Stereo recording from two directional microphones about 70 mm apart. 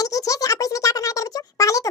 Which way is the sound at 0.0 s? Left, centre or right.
Left.